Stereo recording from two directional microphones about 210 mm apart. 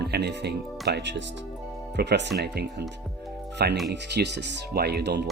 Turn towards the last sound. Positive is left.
turn(degrees=-50)  # may be behind; listen again after turning